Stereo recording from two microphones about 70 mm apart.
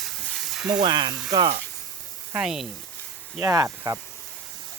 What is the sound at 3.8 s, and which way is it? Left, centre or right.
Speech, right.